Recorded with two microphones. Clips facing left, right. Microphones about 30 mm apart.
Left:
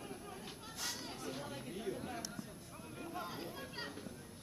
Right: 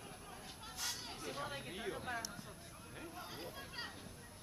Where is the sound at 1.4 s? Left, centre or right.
Right.